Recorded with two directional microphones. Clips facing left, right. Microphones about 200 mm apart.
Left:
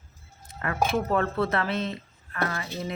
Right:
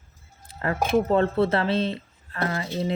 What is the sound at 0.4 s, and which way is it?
Speech, 30° right (ahead or behind).